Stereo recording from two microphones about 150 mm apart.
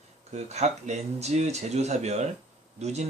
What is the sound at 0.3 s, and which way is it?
Speech, 45° right (ahead or behind).